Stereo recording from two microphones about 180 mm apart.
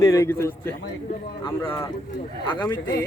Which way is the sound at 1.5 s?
30° left (ahead or behind).